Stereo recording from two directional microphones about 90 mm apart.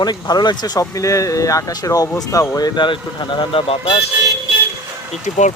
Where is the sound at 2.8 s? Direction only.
60° left (ahead or behind).